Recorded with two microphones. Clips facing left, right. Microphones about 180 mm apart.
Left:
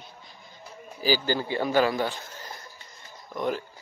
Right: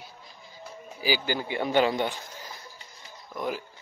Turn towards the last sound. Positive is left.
turn(degrees=-5)  # may be behind; listen again after turning